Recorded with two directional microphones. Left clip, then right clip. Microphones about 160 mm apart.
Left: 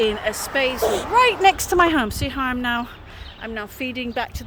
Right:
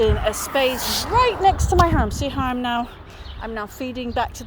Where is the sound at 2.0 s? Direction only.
20° left (ahead or behind); by 4.4 s centre (ahead or behind).